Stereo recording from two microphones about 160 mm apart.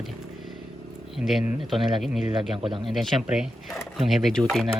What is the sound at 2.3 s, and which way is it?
Speech, 30° right (ahead or behind).